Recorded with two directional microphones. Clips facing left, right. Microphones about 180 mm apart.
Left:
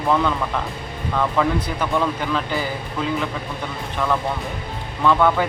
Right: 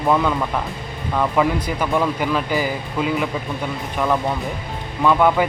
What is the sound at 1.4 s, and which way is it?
Speech, 10° right (ahead or behind).